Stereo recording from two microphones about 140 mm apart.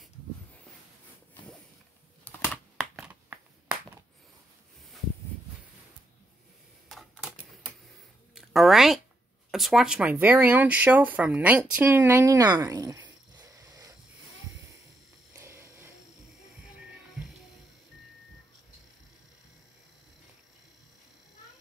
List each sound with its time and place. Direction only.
2.2 s computer keyboard: 15° left (ahead or behind)
6.9 s camera: 5° right (ahead or behind)
8.4 s speech: centre (ahead or behind); by 13.9 s 25° right (ahead or behind)
15.3 s a sound: 20° right (ahead or behind)